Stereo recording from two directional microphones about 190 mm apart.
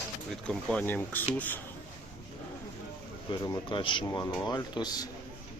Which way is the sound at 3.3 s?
20° left (ahead or behind).